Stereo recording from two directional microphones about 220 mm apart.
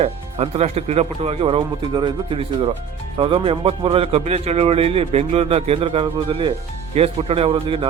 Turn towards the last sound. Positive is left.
turn(degrees=-25)  # may be behind; listen again after turning